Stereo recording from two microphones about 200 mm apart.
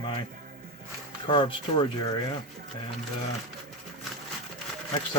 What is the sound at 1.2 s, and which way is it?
Speech, 25° left (ahead or behind).